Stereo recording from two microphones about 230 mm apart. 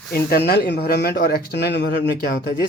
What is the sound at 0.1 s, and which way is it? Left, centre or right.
Speech, left.